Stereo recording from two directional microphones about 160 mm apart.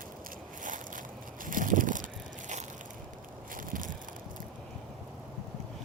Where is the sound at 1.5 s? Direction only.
55° right (ahead or behind).